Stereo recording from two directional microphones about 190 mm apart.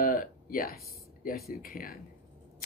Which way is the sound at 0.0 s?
45° left (ahead or behind).